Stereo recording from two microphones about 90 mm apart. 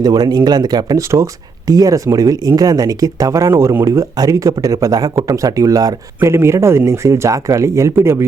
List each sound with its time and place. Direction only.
0.0 s speech: 45° right (ahead or behind)
1.1 s speech: 40° right (ahead or behind)
6.2 s speech: 30° right (ahead or behind)